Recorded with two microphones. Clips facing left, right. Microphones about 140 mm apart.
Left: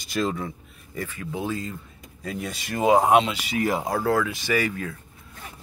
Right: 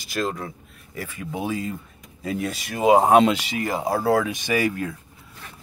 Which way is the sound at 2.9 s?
30° right (ahead or behind).